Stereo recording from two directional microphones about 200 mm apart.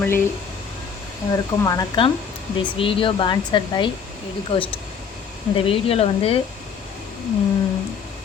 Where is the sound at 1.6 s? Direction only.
20° left (ahead or behind).